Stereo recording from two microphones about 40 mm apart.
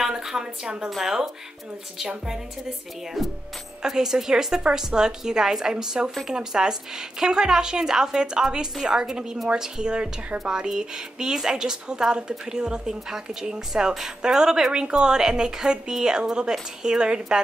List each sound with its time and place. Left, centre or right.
0.0 s a sound: centre
1.0 s a woman's voice: centre
3.2 s speech: centre
3.8 s a woman's voice: centre